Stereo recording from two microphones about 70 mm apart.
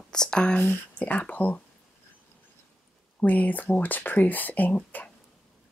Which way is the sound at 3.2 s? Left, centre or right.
Left.